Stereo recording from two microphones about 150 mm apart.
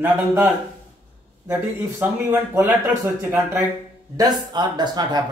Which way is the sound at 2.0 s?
15° right (ahead or behind).